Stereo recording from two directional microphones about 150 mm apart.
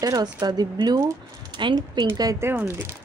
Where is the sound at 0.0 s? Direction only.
25° right (ahead or behind).